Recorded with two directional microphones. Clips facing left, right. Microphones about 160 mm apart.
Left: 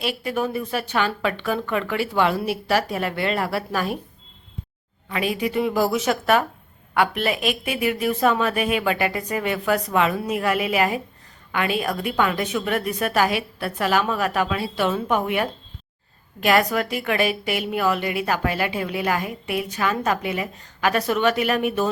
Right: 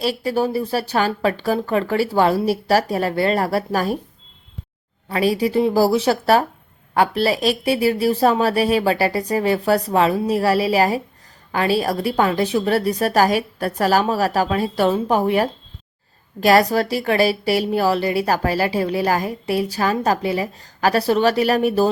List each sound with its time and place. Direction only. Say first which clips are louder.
0.0 s a woman's voice: right 5 dB; 35° right (ahead or behind)
5.0 s a woman's voice: right 6 dB; 35° right (ahead or behind)